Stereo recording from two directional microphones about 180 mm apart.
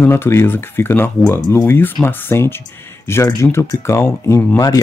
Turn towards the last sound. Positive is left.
turn(degrees=10)  # may be behind; listen again after turning